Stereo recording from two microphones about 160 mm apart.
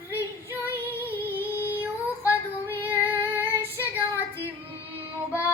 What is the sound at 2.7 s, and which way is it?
Female singing, 15° left (ahead or behind).